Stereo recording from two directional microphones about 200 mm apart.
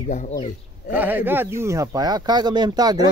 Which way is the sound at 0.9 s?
10° right (ahead or behind).